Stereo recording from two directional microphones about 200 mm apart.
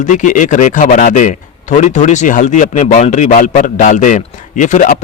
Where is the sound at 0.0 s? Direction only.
40° left (ahead or behind).